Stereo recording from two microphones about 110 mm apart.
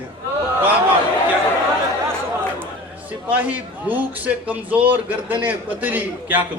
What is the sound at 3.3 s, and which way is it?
A man's voice, 15° right (ahead or behind).